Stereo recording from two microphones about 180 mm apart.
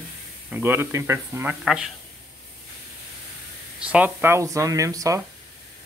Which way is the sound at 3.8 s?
10° right (ahead or behind).